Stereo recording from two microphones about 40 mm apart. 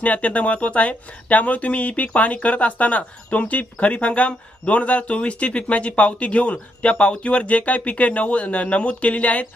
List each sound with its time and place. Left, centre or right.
0.0 s speech: left